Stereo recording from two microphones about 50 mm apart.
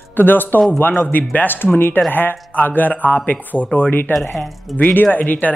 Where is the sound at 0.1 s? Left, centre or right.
Left.